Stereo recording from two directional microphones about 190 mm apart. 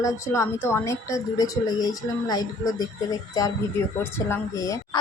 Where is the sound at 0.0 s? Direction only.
15° left (ahead or behind).